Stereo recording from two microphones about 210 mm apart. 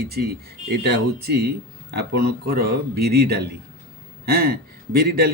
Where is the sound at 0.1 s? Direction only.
50° right (ahead or behind).